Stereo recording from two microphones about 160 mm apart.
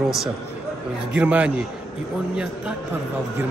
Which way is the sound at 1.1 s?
10° right (ahead or behind).